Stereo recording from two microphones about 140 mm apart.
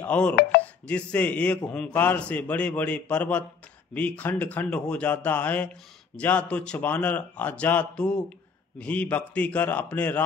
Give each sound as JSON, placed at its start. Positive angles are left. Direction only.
{"t": 0.0, "sound": "a man's voice", "side_deg": 10}